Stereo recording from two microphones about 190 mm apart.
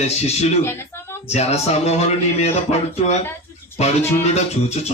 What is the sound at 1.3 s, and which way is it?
Speech, 35° left (ahead or behind).